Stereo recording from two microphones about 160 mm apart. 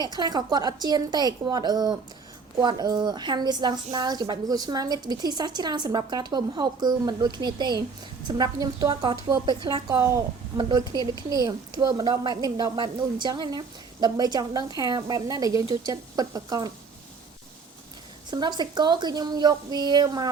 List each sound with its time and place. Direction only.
0.2 s a woman's voice: 25° right (ahead or behind)
18.3 s a woman's voice: 25° right (ahead or behind)